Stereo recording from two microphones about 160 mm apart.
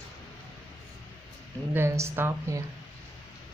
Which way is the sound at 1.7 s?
15° right (ahead or behind).